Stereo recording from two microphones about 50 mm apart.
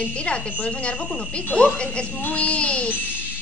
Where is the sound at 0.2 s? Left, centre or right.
Left.